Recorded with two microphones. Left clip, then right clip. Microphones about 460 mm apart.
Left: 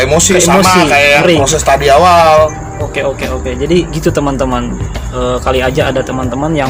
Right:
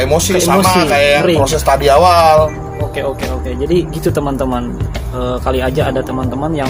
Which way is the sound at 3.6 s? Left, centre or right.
Right.